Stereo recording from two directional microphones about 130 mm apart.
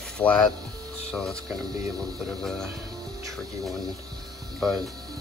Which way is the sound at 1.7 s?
30° right (ahead or behind).